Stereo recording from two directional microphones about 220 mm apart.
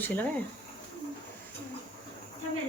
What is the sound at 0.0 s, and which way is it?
Speech, 10° left (ahead or behind).